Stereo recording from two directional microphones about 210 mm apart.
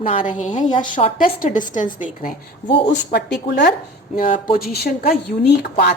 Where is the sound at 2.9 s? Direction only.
50° left (ahead or behind).